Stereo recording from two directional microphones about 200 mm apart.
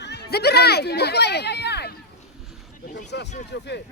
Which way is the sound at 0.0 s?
55° left (ahead or behind).